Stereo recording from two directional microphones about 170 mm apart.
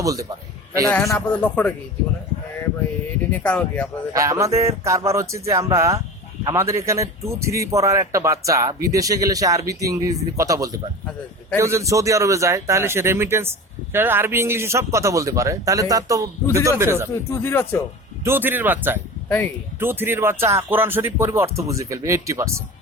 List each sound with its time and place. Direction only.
0.0 s a man's voice: 20° right (ahead or behind)
0.9 s speech: 15° left (ahead or behind)
3.3 s speech: 10° left (ahead or behind)
4.1 s a man's voice: 20° right (ahead or behind)
17.3 s speech: 15° left (ahead or behind)
18.2 s a man's voice: 15° right (ahead or behind)